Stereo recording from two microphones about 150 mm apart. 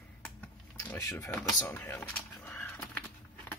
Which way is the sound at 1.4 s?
15° left (ahead or behind).